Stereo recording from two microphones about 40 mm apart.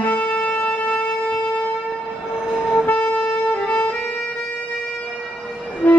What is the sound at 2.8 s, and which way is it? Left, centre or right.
Shofar, left.